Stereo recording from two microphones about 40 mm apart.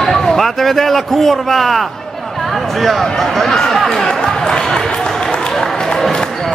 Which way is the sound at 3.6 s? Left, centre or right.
Centre.